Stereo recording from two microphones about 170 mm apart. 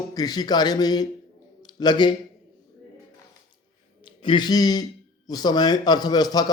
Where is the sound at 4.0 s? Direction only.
30° left (ahead or behind).